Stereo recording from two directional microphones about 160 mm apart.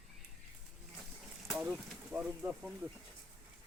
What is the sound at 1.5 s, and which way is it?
Speech, 5° right (ahead or behind).